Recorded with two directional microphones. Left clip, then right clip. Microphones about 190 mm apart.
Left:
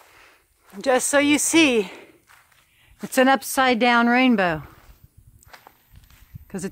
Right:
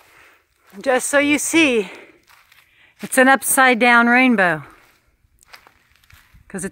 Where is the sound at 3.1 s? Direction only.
15° right (ahead or behind).